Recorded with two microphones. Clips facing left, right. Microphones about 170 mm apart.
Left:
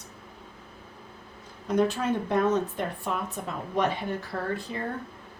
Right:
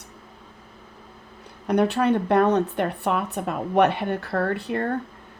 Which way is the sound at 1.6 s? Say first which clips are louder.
Right 5 dB; 65° right (ahead or behind).